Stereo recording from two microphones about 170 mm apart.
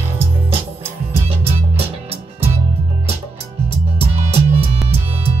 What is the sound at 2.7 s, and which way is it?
Music, 35° right (ahead or behind).